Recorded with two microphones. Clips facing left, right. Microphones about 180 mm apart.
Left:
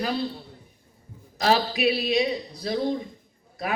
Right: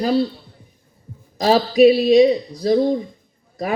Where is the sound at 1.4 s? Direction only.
40° right (ahead or behind).